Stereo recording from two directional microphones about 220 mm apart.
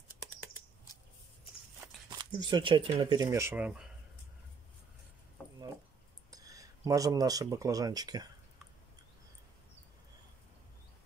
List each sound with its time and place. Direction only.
2.0 s speech: 20° right (ahead or behind); by 3.9 s 5° right (ahead or behind)
6.3 s speech: 15° right (ahead or behind)